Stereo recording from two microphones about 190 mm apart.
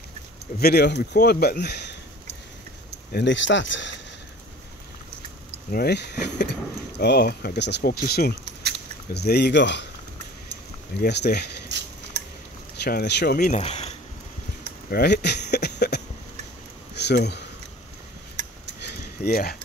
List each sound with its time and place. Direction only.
0.6 s speech: 55° left (ahead or behind)
3.1 s speech: 65° left (ahead or behind)
5.7 s speech: 55° left (ahead or behind)
8.5 s a sound: 65° right (ahead or behind)
9.1 s speech: 60° left (ahead or behind)
11.0 s speech: 60° left (ahead or behind)
12.8 s speech: 60° left (ahead or behind)
13.5 s speech: 35° left (ahead or behind)
14.9 s a sound: 60° left (ahead or behind)
17.0 s speech: 60° left (ahead or behind)
18.8 s a sound: 55° left (ahead or behind)